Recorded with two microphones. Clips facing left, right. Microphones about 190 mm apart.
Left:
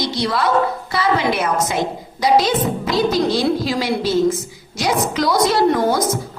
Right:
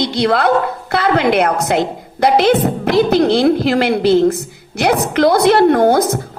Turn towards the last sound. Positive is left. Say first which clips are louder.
# right 5 dB
turn(degrees=-65)  # may be behind; listen again after turning